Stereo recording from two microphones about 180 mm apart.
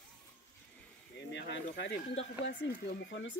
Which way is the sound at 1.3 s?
75° left (ahead or behind).